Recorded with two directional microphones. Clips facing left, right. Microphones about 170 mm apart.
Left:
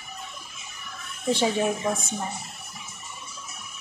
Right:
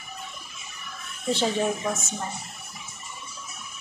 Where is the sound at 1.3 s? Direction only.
15° left (ahead or behind).